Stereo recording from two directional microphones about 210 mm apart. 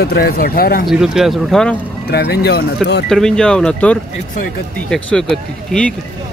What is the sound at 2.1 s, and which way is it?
Speech, 50° left (ahead or behind).